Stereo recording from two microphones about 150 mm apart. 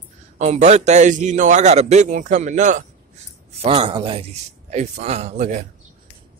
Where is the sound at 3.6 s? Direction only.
35° right (ahead or behind).